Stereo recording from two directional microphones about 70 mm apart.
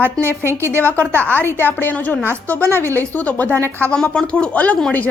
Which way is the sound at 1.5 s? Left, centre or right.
Left.